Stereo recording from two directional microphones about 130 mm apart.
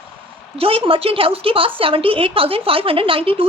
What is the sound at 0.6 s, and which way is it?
A woman's voice, 45° right (ahead or behind).